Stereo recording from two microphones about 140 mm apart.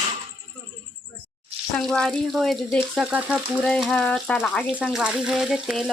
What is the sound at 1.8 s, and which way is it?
Frying, 5° left (ahead or behind).